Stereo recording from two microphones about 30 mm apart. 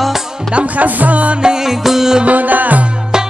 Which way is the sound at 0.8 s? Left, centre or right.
Right.